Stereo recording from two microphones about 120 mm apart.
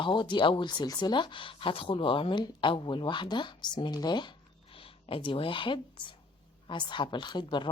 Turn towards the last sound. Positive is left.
turn(degrees=40)  # may be behind; listen again after turning